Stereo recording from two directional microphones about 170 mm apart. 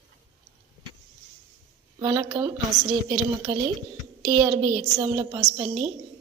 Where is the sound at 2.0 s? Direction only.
25° right (ahead or behind).